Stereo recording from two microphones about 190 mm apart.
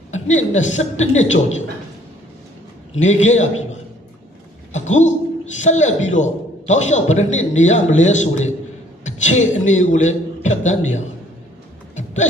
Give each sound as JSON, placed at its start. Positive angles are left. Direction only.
{"t": 0.3, "sound": "a man's voice", "side_deg": 40}
{"t": 3.0, "sound": "a man's voice", "side_deg": 40}
{"t": 11.9, "sound": "a sound", "side_deg": 40}